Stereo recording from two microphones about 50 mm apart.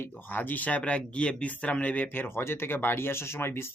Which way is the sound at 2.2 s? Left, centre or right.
Left.